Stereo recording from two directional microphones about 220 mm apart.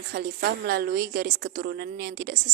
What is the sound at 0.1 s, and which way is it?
A woman's voice, 45° right (ahead or behind).